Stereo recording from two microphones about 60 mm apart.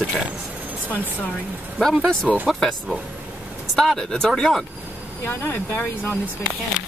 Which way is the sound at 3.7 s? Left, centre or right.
Centre.